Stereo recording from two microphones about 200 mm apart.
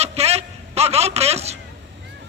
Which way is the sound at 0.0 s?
30° right (ahead or behind).